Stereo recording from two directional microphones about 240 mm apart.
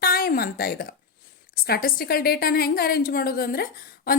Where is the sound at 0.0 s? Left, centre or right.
Left.